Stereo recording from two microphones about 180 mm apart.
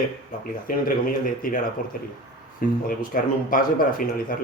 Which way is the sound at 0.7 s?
50° left (ahead or behind).